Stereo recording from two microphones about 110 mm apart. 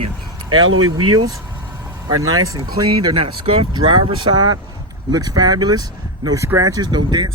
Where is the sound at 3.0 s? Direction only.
45° right (ahead or behind); by 6.7 s 30° right (ahead or behind).